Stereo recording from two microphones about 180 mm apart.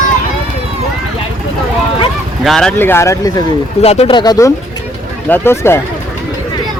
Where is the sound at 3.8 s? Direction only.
35° left (ahead or behind); by 5.8 s 15° left (ahead or behind).